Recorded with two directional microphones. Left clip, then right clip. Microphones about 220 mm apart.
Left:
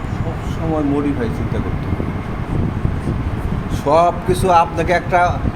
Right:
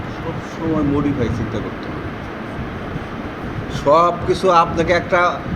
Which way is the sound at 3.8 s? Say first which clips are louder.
Even; 30° left (ahead or behind).